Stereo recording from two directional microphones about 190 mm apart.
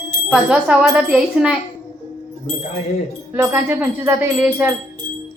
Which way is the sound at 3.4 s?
10° right (ahead or behind).